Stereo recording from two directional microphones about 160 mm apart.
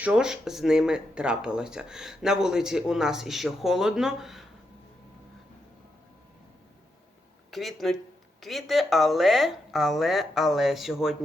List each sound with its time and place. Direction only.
0.0 s speech: 5° right (ahead or behind)
7.5 s speech: centre (ahead or behind)